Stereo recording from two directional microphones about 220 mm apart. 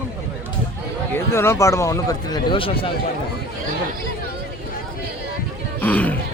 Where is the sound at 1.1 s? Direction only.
10° left (ahead or behind).